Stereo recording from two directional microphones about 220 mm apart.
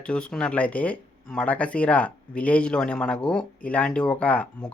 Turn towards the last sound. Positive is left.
turn(degrees=5)  # may be behind; listen again after turning